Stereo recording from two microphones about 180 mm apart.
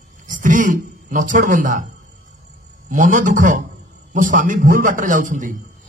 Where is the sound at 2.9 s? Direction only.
45° right (ahead or behind).